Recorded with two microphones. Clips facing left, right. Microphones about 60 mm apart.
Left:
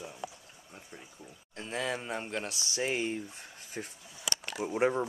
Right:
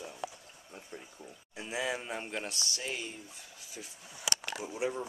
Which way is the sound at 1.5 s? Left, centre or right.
Centre.